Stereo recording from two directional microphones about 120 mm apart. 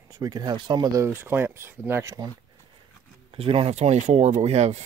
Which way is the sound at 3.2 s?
50° right (ahead or behind).